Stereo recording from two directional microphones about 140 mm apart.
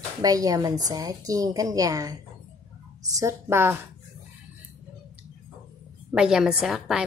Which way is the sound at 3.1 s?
20° right (ahead or behind).